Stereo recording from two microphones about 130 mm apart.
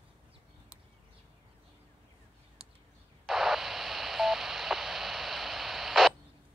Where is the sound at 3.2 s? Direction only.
Centre (ahead or behind).